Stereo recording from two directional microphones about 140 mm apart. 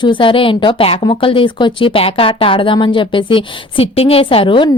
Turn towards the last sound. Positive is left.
turn(degrees=35)  # may be behind; listen again after turning